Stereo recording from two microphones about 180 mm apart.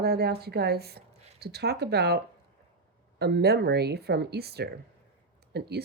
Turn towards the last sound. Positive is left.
turn(degrees=-65)  # may be behind; listen again after turning